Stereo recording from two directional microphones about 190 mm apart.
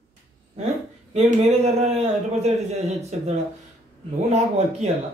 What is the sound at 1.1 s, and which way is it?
A man's voice, 35° right (ahead or behind).